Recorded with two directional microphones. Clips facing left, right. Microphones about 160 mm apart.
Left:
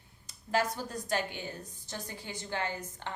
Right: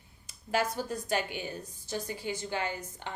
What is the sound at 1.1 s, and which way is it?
A woman's voice, 10° right (ahead or behind).